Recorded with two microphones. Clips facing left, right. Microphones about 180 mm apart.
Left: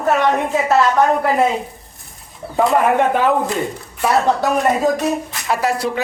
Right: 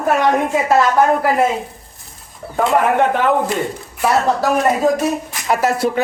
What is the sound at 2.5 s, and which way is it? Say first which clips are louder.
Speech: left 1 dB; centre (ahead or behind).